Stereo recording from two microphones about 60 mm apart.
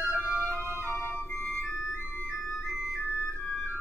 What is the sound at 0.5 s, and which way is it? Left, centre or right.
Organ, right.